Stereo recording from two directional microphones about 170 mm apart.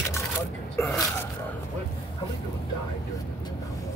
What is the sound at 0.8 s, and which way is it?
Speech, 15° left (ahead or behind).